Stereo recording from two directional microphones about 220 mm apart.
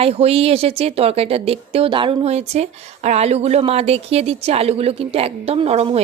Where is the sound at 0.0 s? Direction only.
30° right (ahead or behind).